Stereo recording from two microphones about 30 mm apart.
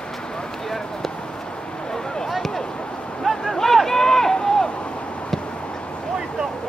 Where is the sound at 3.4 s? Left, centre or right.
Centre.